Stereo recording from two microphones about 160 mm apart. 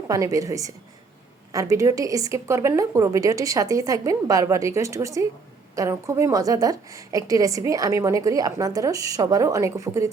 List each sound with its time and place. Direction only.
0.1 s a woman's voice: 20° right (ahead or behind)